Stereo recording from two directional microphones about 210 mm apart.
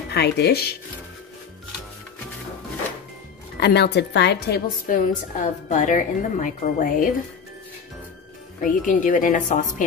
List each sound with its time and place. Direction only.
0.1 s speech: 50° left (ahead or behind)
3.5 s a woman's voice: 50° left (ahead or behind)
8.5 s a woman's voice: 40° left (ahead or behind)